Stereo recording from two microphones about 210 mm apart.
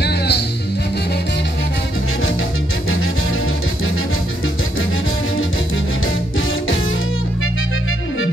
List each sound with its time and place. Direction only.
0.0 s music: 50° left (ahead or behind)